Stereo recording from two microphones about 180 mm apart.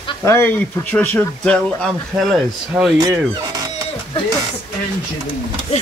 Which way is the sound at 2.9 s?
20° right (ahead or behind).